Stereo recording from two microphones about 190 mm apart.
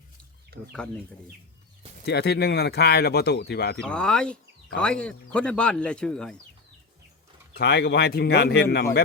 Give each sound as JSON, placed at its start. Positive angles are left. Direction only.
{"t": 0.7, "sound": "speech", "side_deg": 5}
{"t": 2.0, "sound": "speech", "side_deg": 60}
{"t": 3.8, "sound": "speech", "side_deg": 5}
{"t": 7.5, "sound": "speech", "side_deg": 60}